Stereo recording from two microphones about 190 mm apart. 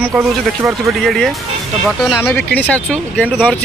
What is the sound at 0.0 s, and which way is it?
Speech, 10° right (ahead or behind).